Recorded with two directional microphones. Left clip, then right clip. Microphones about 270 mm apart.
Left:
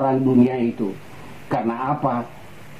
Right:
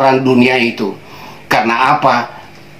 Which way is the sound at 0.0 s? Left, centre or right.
Centre.